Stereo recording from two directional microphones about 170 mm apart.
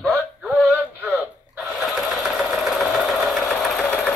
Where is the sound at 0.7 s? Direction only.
10° right (ahead or behind).